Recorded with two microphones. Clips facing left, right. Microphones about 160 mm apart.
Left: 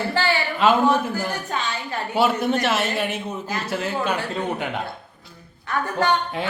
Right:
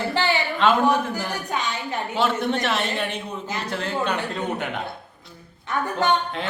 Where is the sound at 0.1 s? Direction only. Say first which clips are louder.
Even; 20° right (ahead or behind).